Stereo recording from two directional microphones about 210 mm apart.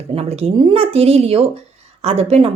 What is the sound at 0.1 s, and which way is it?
Speech, 30° right (ahead or behind).